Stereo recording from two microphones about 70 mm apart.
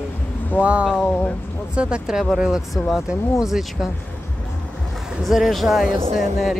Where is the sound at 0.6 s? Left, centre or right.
Centre.